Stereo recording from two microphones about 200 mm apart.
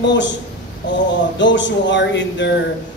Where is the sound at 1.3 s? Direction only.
65° left (ahead or behind).